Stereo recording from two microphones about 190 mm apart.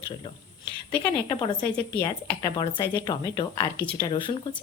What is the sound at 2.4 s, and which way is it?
Speech, 25° left (ahead or behind).